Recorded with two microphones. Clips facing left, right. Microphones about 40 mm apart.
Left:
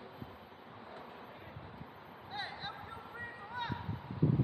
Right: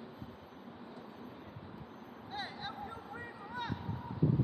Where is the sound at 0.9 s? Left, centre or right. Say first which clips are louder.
Left 1 dB; left.